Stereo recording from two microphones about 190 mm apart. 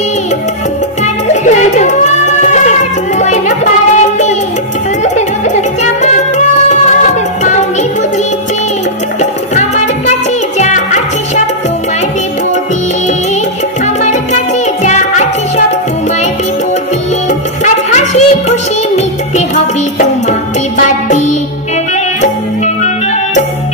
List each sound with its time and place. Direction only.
1.0 s music: 40° left (ahead or behind)
5.0 s music: 40° left (ahead or behind)
9.2 s music: 40° left (ahead or behind)
14.0 s music: 40° left (ahead or behind)
17.9 s music: 35° left (ahead or behind)